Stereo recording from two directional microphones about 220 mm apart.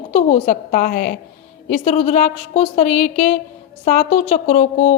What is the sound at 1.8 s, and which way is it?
A woman's voice, 30° left (ahead or behind).